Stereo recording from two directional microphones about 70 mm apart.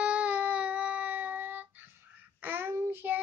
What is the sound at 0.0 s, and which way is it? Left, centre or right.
Music, centre.